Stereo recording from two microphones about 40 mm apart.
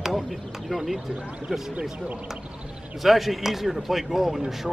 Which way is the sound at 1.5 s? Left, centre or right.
Centre.